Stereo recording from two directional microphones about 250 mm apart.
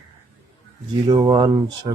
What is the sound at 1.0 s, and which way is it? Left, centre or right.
Speech, centre.